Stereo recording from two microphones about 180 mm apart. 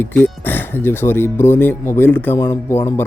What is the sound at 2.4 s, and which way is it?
Speech, 25° left (ahead or behind).